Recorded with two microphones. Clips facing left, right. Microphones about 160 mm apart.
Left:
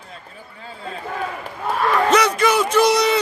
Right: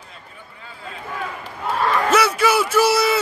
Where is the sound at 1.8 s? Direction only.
5° right (ahead or behind).